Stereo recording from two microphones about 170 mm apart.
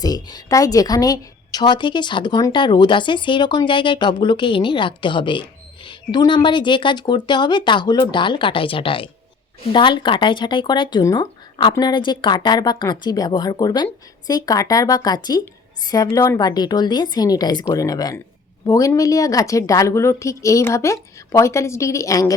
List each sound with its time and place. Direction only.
0.0 s a woman's voice: 25° left (ahead or behind)